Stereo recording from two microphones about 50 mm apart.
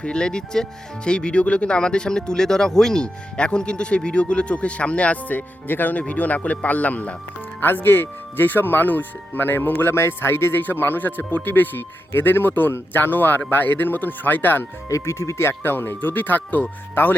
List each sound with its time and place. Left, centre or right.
0.0 s speech: centre
5.6 s speech: left
7.6 s speech: left
14.9 s speech: left
15.4 s speech: left
16.0 s speech: left